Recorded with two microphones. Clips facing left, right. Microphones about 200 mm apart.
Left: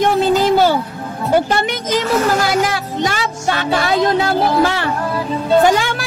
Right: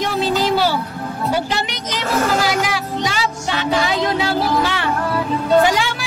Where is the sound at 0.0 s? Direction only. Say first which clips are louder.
Left 5 dB; 50° left (ahead or behind).